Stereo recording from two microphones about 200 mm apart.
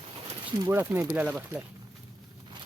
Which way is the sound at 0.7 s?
10° right (ahead or behind).